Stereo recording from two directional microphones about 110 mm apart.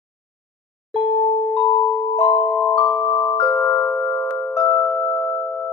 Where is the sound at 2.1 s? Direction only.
70° left (ahead or behind).